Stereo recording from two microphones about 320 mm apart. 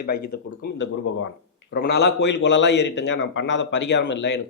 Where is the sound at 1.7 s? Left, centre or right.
Left.